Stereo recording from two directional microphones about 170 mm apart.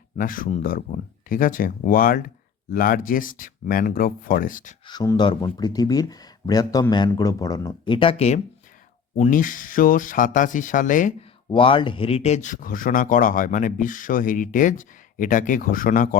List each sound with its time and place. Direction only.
0.2 s speech: 55° left (ahead or behind)
4.9 s speech: 25° left (ahead or behind)
9.1 s speech: 50° left (ahead or behind)
11.4 s speech: 30° left (ahead or behind); by 16.0 s 55° left (ahead or behind)